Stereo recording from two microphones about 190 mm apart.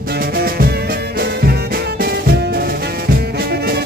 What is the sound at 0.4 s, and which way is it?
Music, 55° right (ahead or behind).